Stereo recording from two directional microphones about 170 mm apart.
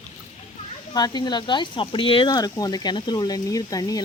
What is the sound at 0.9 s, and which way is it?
Speech, 25° left (ahead or behind).